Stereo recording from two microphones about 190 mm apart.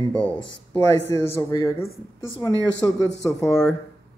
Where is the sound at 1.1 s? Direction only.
15° left (ahead or behind).